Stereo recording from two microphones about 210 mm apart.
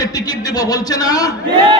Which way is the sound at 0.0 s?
15° left (ahead or behind).